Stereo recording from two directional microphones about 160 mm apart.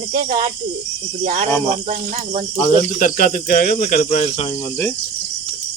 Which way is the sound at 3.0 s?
60° left (ahead or behind).